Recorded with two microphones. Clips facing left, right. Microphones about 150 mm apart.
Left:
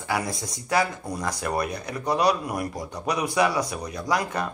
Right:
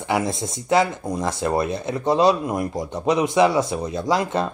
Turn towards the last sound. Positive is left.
turn(degrees=-25)  # may be behind; listen again after turning